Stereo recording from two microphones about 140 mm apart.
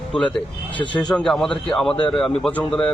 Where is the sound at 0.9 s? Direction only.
5° left (ahead or behind).